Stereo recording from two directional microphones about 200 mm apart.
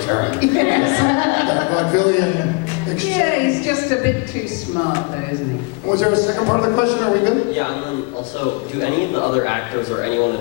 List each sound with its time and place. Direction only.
0.1 s a sound: 20° left (ahead or behind)
3.2 s a woman's voice: 15° left (ahead or behind)
9.1 s a man's voice: 25° left (ahead or behind)